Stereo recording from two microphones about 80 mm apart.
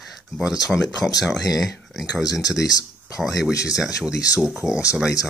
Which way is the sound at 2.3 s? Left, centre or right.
Left.